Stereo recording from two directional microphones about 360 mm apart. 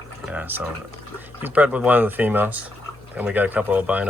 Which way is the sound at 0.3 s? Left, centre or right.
Centre.